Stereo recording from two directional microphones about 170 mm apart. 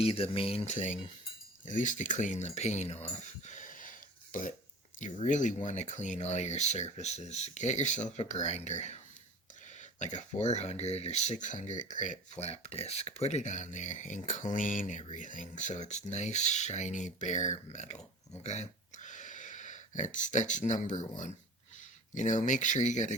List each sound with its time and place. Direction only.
0.0 s speech: 35° left (ahead or behind)
10.0 s speech: 45° left (ahead or behind)